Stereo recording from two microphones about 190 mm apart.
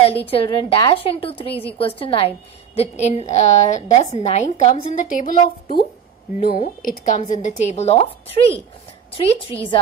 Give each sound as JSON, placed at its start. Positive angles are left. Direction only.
{"t": 0.0, "sound": "a woman's voice", "side_deg": 30}